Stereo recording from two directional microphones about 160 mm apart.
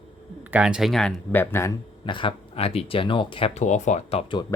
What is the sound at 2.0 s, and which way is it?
Speech, 30° left (ahead or behind).